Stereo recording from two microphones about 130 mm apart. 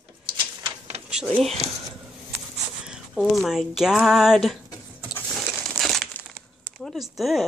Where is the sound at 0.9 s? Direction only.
55° right (ahead or behind).